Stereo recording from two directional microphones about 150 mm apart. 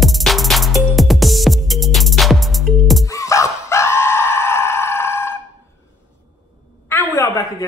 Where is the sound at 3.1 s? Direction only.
20° left (ahead or behind).